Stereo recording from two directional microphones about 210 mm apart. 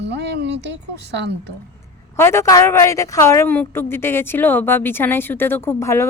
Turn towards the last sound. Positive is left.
turn(degrees=15)  # may be behind; listen again after turning